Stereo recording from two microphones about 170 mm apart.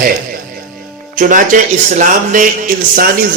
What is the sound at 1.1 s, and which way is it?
A man's voice, 55° right (ahead or behind).